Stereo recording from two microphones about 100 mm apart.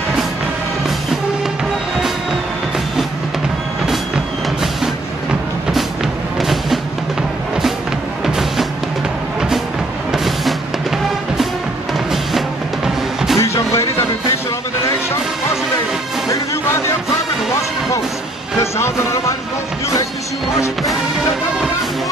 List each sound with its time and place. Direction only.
6.4 s music: centre (ahead or behind)
8.3 s music: 5° right (ahead or behind)
10.1 s music: centre (ahead or behind)
12.1 s music: centre (ahead or behind)
13.4 s music: 30° left (ahead or behind)
18.6 s music: 30° left (ahead or behind)